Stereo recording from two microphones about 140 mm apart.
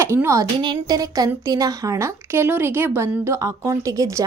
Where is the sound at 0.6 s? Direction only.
30° right (ahead or behind).